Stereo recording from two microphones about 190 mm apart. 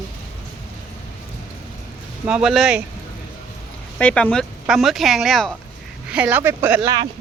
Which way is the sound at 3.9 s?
5° left (ahead or behind).